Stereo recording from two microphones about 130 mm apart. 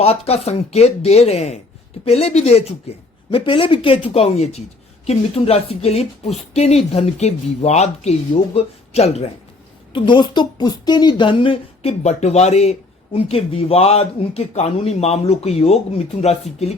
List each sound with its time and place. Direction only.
0.0 s speech: 50° left (ahead or behind)
3.3 s speech: 40° left (ahead or behind)
9.9 s speech: 35° left (ahead or behind); by 16.4 s 55° left (ahead or behind)